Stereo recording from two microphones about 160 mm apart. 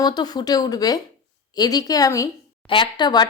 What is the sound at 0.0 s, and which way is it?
Speech, 25° left (ahead or behind).